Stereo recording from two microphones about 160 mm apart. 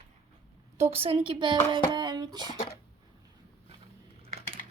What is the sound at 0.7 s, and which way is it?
Speech, 40° right (ahead or behind).